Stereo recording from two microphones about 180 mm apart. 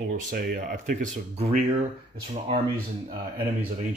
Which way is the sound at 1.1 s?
40° right (ahead or behind).